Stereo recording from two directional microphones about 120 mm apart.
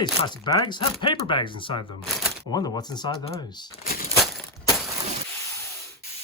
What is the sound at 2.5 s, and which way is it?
Speech, 35° left (ahead or behind).